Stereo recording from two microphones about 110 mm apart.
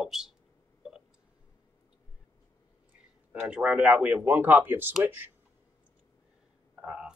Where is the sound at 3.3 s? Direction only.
10° right (ahead or behind).